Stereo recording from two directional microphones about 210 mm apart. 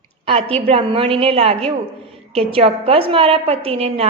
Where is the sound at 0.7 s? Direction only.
25° right (ahead or behind).